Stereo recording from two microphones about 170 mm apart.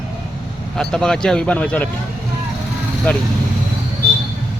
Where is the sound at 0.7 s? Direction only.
5° left (ahead or behind).